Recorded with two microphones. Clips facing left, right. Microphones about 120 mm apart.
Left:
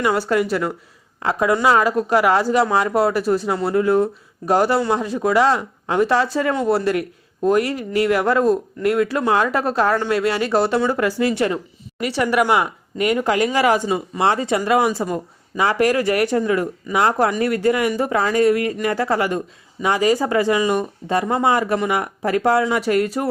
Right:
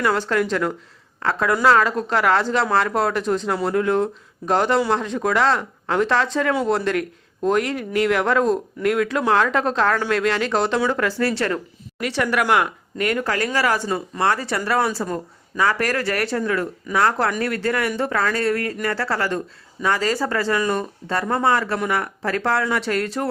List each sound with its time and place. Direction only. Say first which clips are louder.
0.0 s speech: left 2 dB; 10° left (ahead or behind)